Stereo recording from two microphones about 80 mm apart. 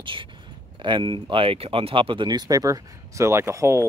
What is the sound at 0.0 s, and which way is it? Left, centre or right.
Speech, right.